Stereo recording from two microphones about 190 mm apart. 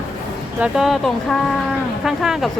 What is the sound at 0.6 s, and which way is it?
Speech, centre (ahead or behind).